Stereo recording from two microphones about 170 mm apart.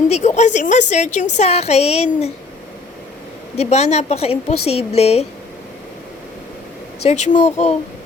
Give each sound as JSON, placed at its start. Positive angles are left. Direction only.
{"t": 0.1, "sound": "a woman's voice", "side_deg": 45}
{"t": 3.6, "sound": "a woman's voice", "side_deg": 40}
{"t": 7.0, "sound": "a woman's voice", "side_deg": 40}